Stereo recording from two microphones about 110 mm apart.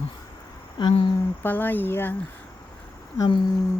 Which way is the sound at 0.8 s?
40° left (ahead or behind).